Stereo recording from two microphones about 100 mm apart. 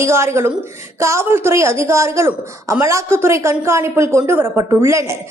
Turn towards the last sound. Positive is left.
turn(degrees=-25)  # may be behind; listen again after turning